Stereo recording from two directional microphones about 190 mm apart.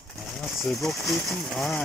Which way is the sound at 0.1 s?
Centre (ahead or behind).